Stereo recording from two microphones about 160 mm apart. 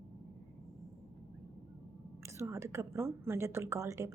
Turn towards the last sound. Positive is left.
turn(degrees=-20)  # may be behind; listen again after turning